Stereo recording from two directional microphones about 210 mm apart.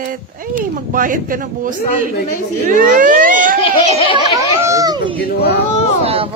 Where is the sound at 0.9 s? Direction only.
40° right (ahead or behind).